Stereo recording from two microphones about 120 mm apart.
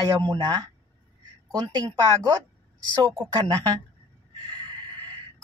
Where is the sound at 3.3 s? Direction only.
40° right (ahead or behind).